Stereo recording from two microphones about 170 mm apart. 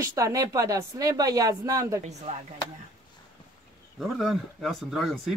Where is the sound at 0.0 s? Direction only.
20° right (ahead or behind).